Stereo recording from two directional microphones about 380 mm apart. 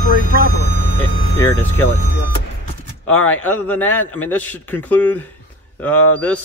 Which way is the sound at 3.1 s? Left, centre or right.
Centre.